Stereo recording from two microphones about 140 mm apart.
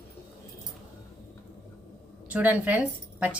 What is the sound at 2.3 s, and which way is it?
Speech, 10° right (ahead or behind).